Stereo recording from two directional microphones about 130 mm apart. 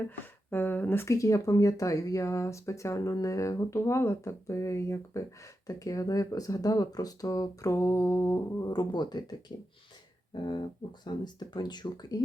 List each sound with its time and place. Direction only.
0.5 s speech: 15° left (ahead or behind); by 9.3 s 35° left (ahead or behind)
10.3 s speech: 35° left (ahead or behind)